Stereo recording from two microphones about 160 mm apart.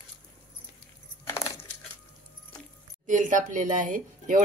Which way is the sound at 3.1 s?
50° right (ahead or behind).